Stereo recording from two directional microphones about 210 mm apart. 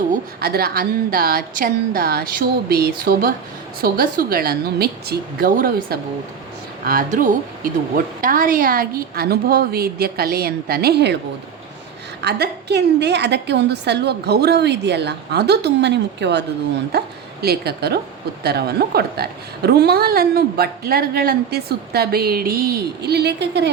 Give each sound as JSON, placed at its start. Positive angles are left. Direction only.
{"t": 0.1, "sound": "a woman's voice", "side_deg": -45}
{"t": 12.2, "sound": "a woman's voice", "side_deg": -50}